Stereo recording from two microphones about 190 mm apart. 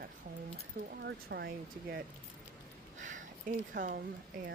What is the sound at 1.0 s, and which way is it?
Speech, 60° right (ahead or behind).